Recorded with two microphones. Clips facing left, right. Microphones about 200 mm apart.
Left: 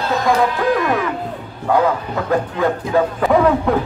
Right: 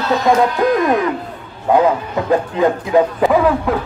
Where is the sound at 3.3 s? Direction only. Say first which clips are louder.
Left 2 dB; centre (ahead or behind).